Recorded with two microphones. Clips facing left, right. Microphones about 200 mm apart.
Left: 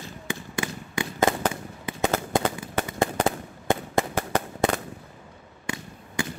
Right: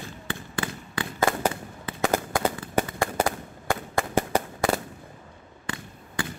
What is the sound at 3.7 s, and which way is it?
Fireworks, 20° left (ahead or behind).